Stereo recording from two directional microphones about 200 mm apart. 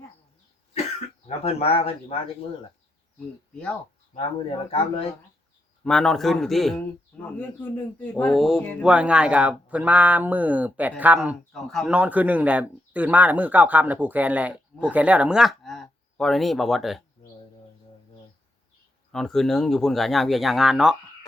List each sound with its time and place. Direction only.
1.5 s speech: 30° left (ahead or behind)
3.5 s a man's voice: 5° left (ahead or behind)
5.8 s a man's voice: centre (ahead or behind)
19.1 s a man's voice: centre (ahead or behind)